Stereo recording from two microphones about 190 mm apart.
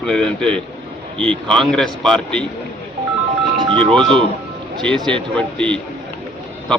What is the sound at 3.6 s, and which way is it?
Music, 25° right (ahead or behind).